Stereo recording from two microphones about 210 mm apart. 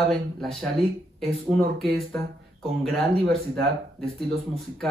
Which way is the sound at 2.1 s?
Centre (ahead or behind).